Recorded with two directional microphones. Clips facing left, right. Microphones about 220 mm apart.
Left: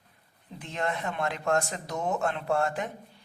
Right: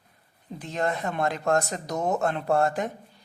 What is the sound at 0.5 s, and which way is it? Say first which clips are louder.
A woman's voice: right 4 dB; 40° right (ahead or behind).